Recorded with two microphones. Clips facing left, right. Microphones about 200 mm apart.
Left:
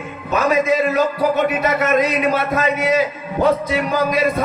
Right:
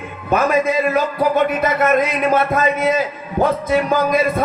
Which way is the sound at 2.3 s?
50° right (ahead or behind).